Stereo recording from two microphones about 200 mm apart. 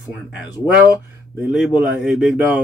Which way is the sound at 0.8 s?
10° right (ahead or behind).